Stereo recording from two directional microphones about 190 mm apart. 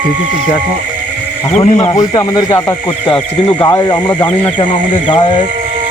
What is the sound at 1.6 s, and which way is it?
Speech, 25° left (ahead or behind).